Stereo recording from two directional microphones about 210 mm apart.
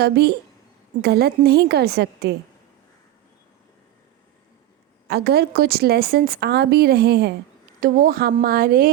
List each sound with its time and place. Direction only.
0.0 s a woman's voice: 50° right (ahead or behind)
5.0 s a woman's voice: 50° right (ahead or behind)